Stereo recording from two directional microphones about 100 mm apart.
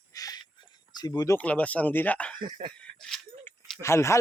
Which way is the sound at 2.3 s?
50° right (ahead or behind).